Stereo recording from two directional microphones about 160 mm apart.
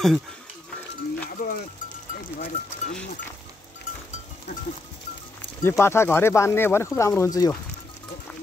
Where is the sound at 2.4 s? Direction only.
50° left (ahead or behind).